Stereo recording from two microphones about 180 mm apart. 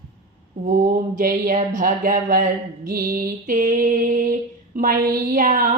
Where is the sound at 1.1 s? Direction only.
45° right (ahead or behind).